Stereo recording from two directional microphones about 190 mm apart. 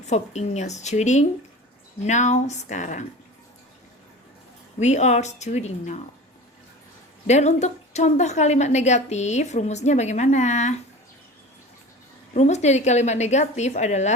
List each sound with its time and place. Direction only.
0.1 s a woman's voice: 35° left (ahead or behind)
4.8 s a woman's voice: 35° left (ahead or behind)
7.3 s a woman's voice: 35° left (ahead or behind)
12.3 s a woman's voice: 35° left (ahead or behind)